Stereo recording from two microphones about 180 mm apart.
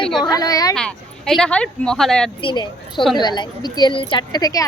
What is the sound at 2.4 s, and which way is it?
Speech, 25° left (ahead or behind).